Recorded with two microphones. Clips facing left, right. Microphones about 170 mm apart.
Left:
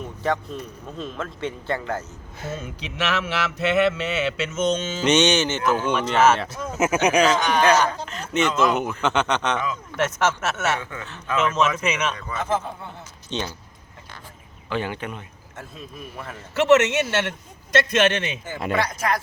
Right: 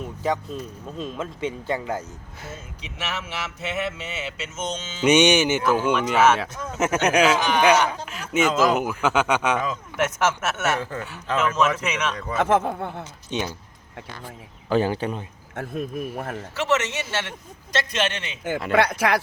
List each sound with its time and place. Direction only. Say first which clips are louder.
1.1 s speech: right 1 dB; 10° right (ahead or behind)
2.6 s speech: left 7 dB; 75° left (ahead or behind); by 5.0 s 55° left (ahead or behind)
5.0 s speech: right 2 dB; 10° right (ahead or behind)
10.8 s a man's voice: right 4 dB; 35° right (ahead or behind)
11.3 s a man's voice: even; centre (ahead or behind)
12.4 s speech: right 6 dB; 65° right (ahead or behind)
13.3 s speech: right 1 dB; 15° right (ahead or behind)
14.7 s a man's voice: right 6 dB; 35° right (ahead or behind)
15.5 s speech: right 10 dB; 55° right (ahead or behind)
16.6 s a man's voice: left 8 dB; 60° left (ahead or behind)
18.7 s speech: right 3 dB; 60° right (ahead or behind)